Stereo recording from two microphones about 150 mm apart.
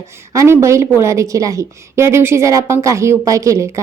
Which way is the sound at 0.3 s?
20° right (ahead or behind).